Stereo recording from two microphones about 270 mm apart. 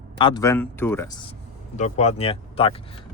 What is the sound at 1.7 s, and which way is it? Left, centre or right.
Speech, left.